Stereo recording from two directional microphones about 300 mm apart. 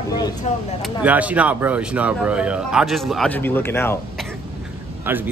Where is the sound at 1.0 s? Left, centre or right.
Centre.